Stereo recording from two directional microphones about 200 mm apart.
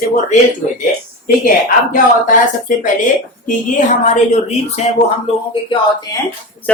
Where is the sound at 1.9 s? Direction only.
40° left (ahead or behind).